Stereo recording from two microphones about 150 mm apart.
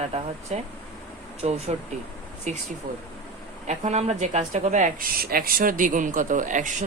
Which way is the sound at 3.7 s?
50° right (ahead or behind).